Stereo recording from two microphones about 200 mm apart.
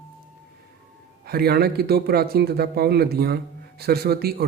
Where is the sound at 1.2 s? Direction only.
50° right (ahead or behind).